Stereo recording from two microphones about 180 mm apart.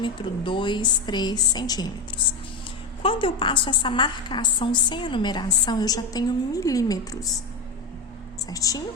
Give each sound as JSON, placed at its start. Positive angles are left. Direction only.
{"t": 0.0, "sound": "a woman's voice", "side_deg": 25}
{"t": 3.0, "sound": "a woman's voice", "side_deg": 30}
{"t": 8.4, "sound": "a woman's voice", "side_deg": 20}